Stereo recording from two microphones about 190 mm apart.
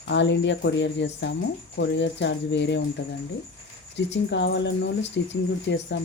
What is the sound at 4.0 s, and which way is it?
Speech, 70° left (ahead or behind).